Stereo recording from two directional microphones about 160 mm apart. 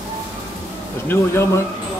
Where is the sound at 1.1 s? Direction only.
15° left (ahead or behind).